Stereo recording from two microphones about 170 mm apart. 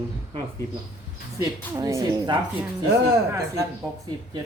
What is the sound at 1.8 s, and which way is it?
Speech, 20° right (ahead or behind).